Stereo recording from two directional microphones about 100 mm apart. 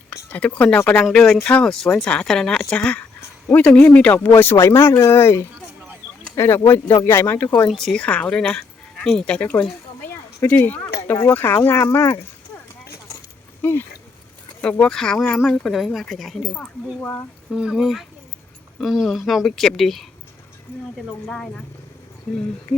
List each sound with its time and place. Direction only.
0.3 s a woman's voice: 15° left (ahead or behind)
3.2 s a sound: 25° left (ahead or behind)
3.8 s a woman's voice: 15° left (ahead or behind)
7.7 s a woman's voice: centre (ahead or behind); by 12.1 s 25° left (ahead or behind)
13.6 s speech: 20° left (ahead or behind)
14.6 s a woman's voice: 10° left (ahead or behind)
16.6 s a woman's voice: 15° left (ahead or behind)
17.5 s speech: 5° right (ahead or behind)
21.2 s a woman's voice: 10° left (ahead or behind)